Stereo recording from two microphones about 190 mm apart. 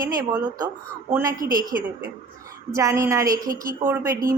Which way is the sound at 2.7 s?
15° right (ahead or behind).